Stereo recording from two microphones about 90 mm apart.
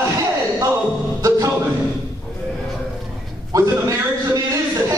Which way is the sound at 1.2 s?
40° right (ahead or behind).